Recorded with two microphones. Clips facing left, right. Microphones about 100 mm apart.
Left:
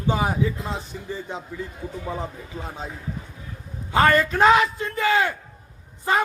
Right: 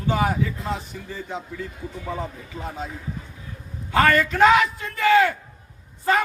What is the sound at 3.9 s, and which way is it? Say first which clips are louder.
A man's voice: even; 20° left (ahead or behind).